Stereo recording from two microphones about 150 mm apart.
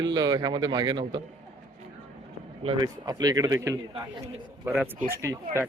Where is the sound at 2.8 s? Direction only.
25° right (ahead or behind).